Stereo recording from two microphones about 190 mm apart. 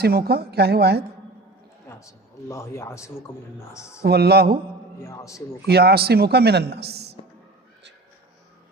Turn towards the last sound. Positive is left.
turn(degrees=-60)  # may be behind; listen again after turning